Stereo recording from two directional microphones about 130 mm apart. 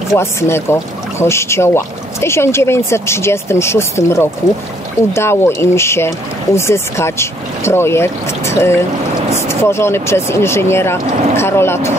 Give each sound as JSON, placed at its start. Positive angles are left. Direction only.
{"t": 0.1, "sound": "speech", "side_deg": 20}